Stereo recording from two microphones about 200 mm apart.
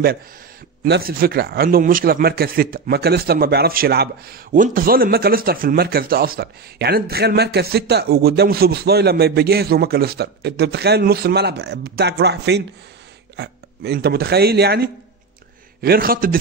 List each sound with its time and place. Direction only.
0.8 s a man's voice: 50° right (ahead or behind)